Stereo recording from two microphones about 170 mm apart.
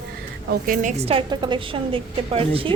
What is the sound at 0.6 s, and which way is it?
Speech, 50° right (ahead or behind).